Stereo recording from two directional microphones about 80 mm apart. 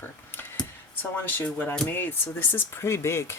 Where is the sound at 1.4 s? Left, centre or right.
Left.